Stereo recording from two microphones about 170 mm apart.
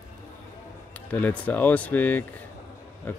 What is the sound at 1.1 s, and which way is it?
Speech, 10° left (ahead or behind).